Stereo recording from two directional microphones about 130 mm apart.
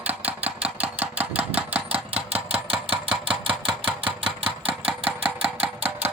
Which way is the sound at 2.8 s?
45° right (ahead or behind).